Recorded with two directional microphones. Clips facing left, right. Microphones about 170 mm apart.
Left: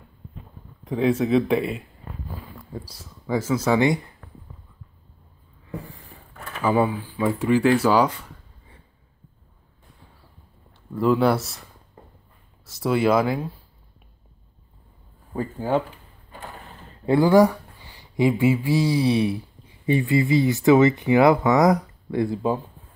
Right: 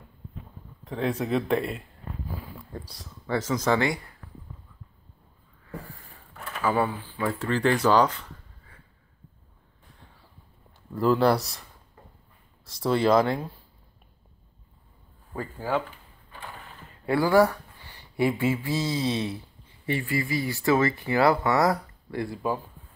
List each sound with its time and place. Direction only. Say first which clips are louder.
0.8 s speech: left 7 dB; 5° left (ahead or behind)
2.9 s speech: left 3 dB; 10° left (ahead or behind)
6.6 s speech: left 4 dB; 15° left (ahead or behind)
11.0 s speech: left 2 dB; centre (ahead or behind)
12.6 s speech: left 2 dB; 5° left (ahead or behind)
15.3 s speech: left 5 dB; 20° left (ahead or behind)
17.0 s speech: left 4 dB; 20° left (ahead or behind)